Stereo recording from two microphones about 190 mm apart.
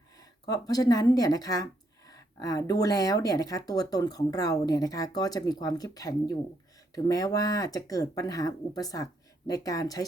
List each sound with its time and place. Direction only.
0.2 s speech: 20° left (ahead or behind)